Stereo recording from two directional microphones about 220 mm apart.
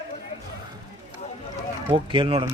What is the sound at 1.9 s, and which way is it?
Speech, 25° right (ahead or behind).